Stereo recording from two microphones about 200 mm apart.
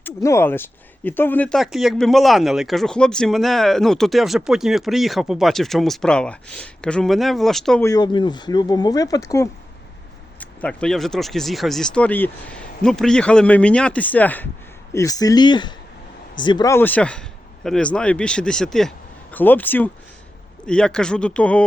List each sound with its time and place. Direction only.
0.0 s speech: 15° left (ahead or behind)
7.8 s speech: 15° left (ahead or behind)